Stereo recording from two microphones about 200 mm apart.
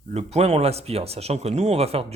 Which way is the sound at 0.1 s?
30° right (ahead or behind).